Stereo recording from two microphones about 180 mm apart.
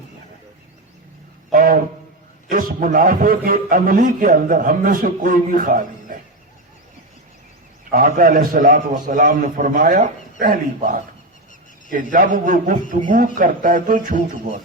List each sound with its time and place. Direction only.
1.5 s a sound: 50° right (ahead or behind)
2.5 s a man's voice: 50° right (ahead or behind)
7.9 s a man's voice: 50° right (ahead or behind)